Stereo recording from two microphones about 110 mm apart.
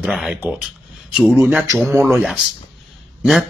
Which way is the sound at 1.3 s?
15° right (ahead or behind).